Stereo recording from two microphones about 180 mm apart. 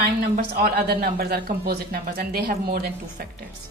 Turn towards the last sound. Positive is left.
turn(degrees=-55)  # may be behind; listen again after turning